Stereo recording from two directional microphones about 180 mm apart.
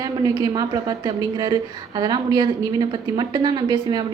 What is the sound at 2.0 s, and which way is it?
A woman's voice, 25° right (ahead or behind).